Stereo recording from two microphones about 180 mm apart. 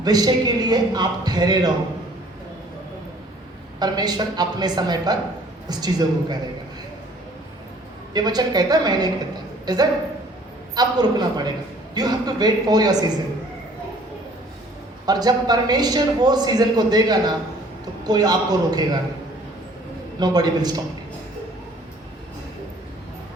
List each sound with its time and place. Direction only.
0.0 s a man's voice: 20° right (ahead or behind)
3.8 s a man's voice: 20° right (ahead or behind)
8.1 s a man's voice: 20° right (ahead or behind)
15.0 s a man's voice: 20° right (ahead or behind)
20.1 s a man's voice: 20° right (ahead or behind)